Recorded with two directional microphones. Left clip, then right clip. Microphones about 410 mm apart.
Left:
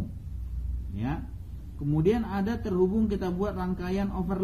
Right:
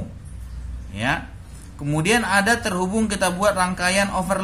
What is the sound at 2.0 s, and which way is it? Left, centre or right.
Speech, centre.